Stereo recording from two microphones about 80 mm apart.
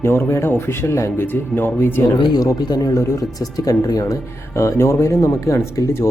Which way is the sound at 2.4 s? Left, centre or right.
Left.